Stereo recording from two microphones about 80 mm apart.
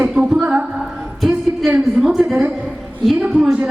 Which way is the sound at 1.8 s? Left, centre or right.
Centre.